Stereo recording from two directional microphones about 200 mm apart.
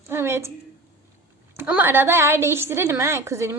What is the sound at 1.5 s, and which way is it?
Speech, 10° right (ahead or behind).